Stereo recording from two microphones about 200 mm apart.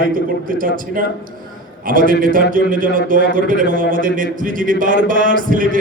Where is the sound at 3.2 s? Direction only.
60° left (ahead or behind).